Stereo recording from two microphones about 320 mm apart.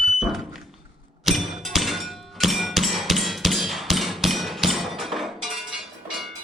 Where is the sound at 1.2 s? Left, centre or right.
Centre.